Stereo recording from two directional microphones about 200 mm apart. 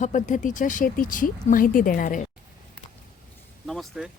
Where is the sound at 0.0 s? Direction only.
40° left (ahead or behind).